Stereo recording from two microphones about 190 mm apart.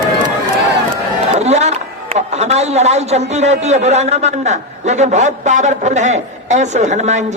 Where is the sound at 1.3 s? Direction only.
35° right (ahead or behind).